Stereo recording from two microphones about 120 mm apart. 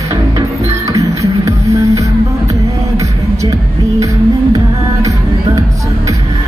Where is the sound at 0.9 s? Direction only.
25° right (ahead or behind).